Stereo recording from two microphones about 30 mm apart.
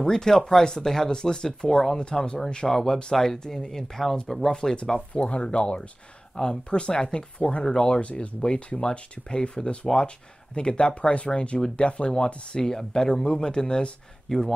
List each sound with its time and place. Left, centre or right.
0.0 s speech: centre
2.0 s speech: left
5.1 s speech: left
5.6 s speech: left
7.3 s speech: left
7.6 s speech: left
8.0 s speech: left
8.4 s speech: left
12.5 s speech: left
14.3 s speech: centre